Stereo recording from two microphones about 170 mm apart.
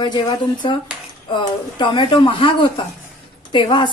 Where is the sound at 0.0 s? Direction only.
25° left (ahead or behind).